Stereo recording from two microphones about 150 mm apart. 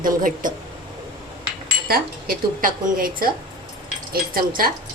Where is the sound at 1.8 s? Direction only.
85° right.